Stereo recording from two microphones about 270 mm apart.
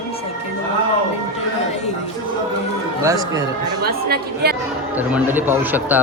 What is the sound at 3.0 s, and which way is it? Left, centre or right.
Speech, centre.